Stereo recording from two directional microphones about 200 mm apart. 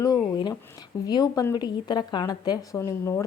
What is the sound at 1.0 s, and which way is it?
Speech, 20° left (ahead or behind).